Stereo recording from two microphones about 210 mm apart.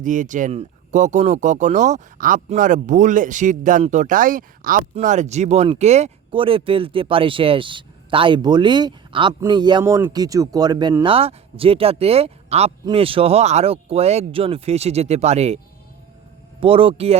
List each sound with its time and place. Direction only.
0.0 s speech: 35° right (ahead or behind)
16.6 s speech: 25° right (ahead or behind)